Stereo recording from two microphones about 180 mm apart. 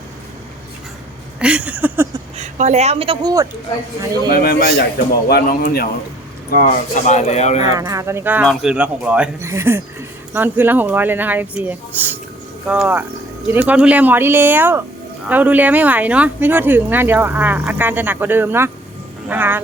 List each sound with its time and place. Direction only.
1.4 s a sound: 5° right (ahead or behind)
2.4 s a woman's voice: 40° right (ahead or behind)
4.3 s a man's voice: 60° left (ahead or behind)
6.6 s speech: 45° left (ahead or behind)
7.7 s speech: 20° right (ahead or behind)